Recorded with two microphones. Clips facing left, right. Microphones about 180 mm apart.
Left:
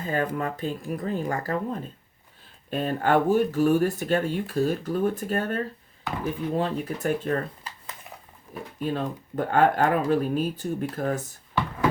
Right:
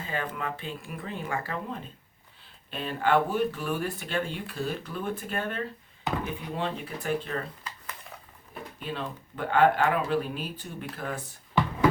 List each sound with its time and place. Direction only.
0.0 s speech: 40° left (ahead or behind)
6.1 s speech: 20° right (ahead or behind)
6.6 s speech: 40° left (ahead or behind)
8.8 s speech: 45° left (ahead or behind)